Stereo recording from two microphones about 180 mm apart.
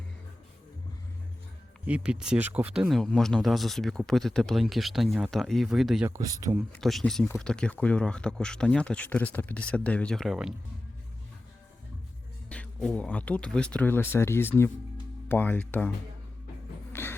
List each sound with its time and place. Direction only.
1.9 s speech: 5° right (ahead or behind)
6.1 s speech: 20° right (ahead or behind)
6.7 s speech: 5° left (ahead or behind)
12.5 s speech: 5° left (ahead or behind)
16.9 s a sound: 10° left (ahead or behind)